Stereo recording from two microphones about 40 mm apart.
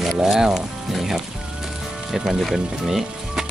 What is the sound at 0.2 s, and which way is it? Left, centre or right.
Speech, centre.